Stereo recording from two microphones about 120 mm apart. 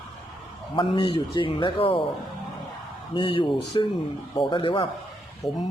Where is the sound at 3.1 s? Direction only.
40° left (ahead or behind).